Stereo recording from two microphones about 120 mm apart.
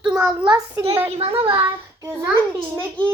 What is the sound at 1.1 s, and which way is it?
Speech, 60° right (ahead or behind).